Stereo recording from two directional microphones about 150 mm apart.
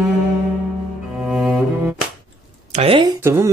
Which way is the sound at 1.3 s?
5° right (ahead or behind).